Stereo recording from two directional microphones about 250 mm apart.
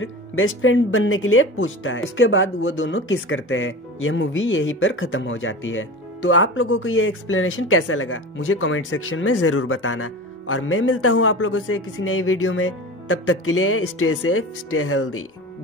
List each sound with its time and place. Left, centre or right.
0.0 s speech: left